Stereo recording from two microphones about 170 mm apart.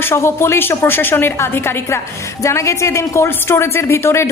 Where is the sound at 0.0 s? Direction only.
15° left (ahead or behind).